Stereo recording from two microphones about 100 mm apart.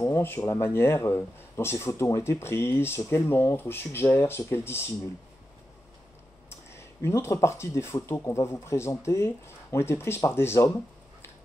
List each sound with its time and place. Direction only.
0.0 s speech: 25° left (ahead or behind)
6.5 s speech: 25° left (ahead or behind)